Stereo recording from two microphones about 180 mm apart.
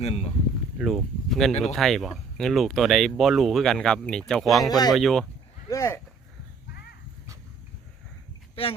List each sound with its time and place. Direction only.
0.0 s speech: 35° left (ahead or behind)
0.8 s speech: centre (ahead or behind)
4.6 s speech: 20° left (ahead or behind)
4.9 s speech: centre (ahead or behind)
5.6 s a sound: 15° left (ahead or behind)